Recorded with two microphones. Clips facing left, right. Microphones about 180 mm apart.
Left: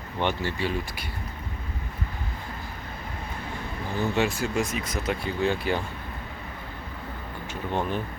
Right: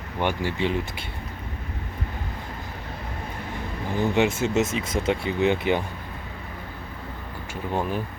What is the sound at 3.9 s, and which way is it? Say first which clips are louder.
Speech: right 4 dB; 15° right (ahead or behind).